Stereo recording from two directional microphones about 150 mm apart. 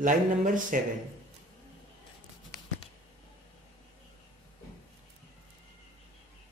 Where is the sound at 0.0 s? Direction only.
60° right (ahead or behind).